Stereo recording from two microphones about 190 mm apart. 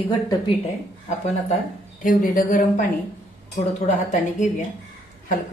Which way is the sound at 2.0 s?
45° left (ahead or behind).